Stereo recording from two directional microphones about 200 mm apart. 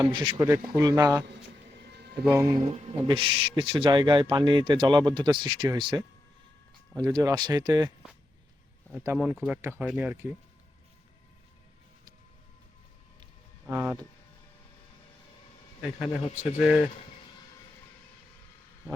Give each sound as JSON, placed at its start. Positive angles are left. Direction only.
{"t": 0.0, "sound": "speech", "side_deg": -25}
{"t": 0.3, "sound": "speech", "side_deg": -15}
{"t": 1.2, "sound": "a sound", "side_deg": -60}
{"t": 2.4, "sound": "speech", "side_deg": -20}
{"t": 9.0, "sound": "speech", "side_deg": -10}
{"t": 13.7, "sound": "speech", "side_deg": -10}
{"t": 16.4, "sound": "speech", "side_deg": -5}